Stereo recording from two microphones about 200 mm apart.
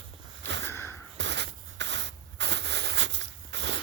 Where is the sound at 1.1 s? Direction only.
60° right (ahead or behind).